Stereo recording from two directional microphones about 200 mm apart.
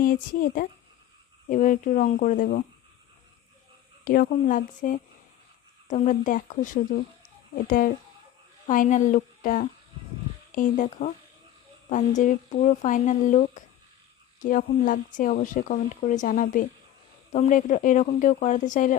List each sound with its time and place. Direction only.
0.0 s a woman's voice: 45° left (ahead or behind)
4.0 s a woman's voice: 45° left (ahead or behind)